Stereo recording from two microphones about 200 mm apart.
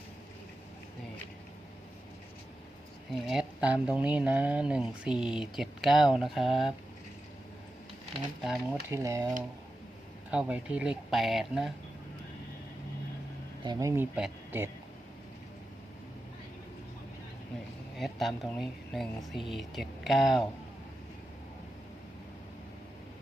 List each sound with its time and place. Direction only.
3.2 s speech: 5° right (ahead or behind)
8.4 s speech: centre (ahead or behind)
8.9 s speech: 15° right (ahead or behind)
10.3 s speech: 5° right (ahead or behind)
13.7 s speech: 15° right (ahead or behind)
17.9 s speech: centre (ahead or behind)